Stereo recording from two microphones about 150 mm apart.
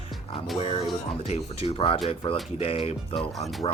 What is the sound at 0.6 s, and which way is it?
Speech, 45° left (ahead or behind).